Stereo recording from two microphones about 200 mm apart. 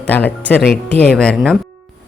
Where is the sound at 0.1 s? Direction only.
10° left (ahead or behind).